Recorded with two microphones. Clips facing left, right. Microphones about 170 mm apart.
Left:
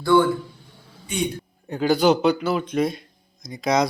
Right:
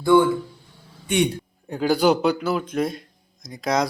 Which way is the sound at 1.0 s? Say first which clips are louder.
Right 5 dB; 75° right (ahead or behind).